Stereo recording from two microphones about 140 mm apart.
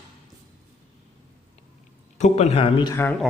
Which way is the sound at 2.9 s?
15° left (ahead or behind).